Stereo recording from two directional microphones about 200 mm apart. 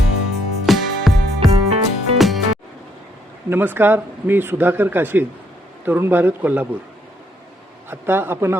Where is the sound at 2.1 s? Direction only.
Centre (ahead or behind).